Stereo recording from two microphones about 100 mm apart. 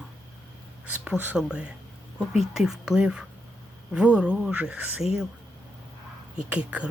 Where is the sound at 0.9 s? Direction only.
15° right (ahead or behind).